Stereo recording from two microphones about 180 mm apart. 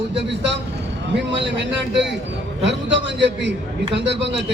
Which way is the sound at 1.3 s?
80° right.